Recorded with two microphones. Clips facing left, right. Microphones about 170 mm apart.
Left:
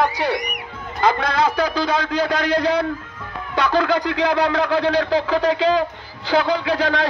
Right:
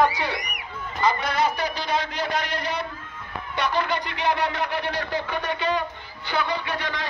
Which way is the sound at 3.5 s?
90° left.